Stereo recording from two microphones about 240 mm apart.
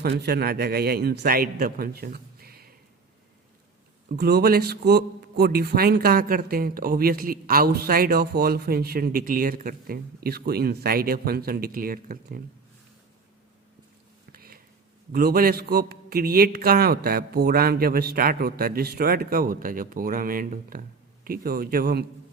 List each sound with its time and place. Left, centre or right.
0.0 s a man's voice: right
4.2 s a man's voice: right
14.3 s a sound: right
15.1 s a man's voice: right